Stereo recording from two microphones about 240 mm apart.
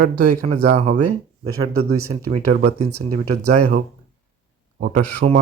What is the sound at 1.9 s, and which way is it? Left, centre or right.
Speech, right.